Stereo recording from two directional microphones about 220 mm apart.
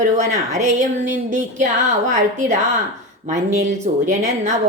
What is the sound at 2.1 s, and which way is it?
Speech, 35° right (ahead or behind).